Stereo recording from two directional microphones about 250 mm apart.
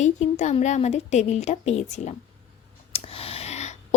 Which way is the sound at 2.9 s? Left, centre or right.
Left.